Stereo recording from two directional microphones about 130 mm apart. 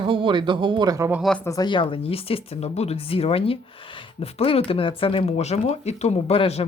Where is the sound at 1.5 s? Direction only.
30° left (ahead or behind).